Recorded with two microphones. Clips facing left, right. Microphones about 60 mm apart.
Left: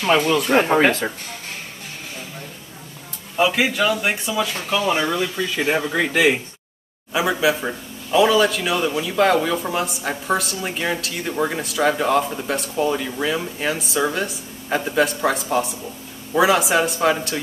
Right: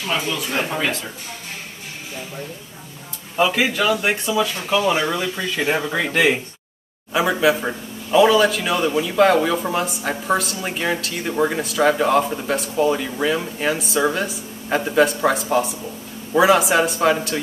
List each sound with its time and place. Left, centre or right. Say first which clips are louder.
0.0 s speech: left 6 dB; left
3.3 s a man's voice: even; centre